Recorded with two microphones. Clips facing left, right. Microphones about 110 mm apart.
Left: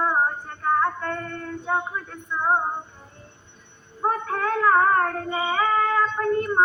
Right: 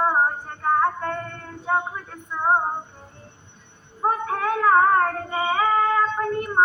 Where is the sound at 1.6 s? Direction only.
35° right (ahead or behind).